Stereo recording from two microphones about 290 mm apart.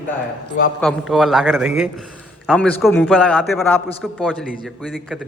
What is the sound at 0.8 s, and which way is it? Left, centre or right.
A man's voice, centre.